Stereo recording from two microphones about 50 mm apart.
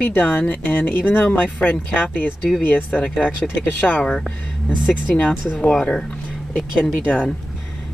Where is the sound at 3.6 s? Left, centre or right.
Left.